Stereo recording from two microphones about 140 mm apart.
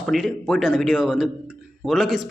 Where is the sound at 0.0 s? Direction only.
Centre (ahead or behind).